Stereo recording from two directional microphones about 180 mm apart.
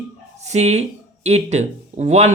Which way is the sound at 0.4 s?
40° right (ahead or behind).